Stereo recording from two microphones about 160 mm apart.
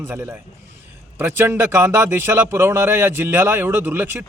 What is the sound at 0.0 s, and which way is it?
A man's voice, 15° right (ahead or behind).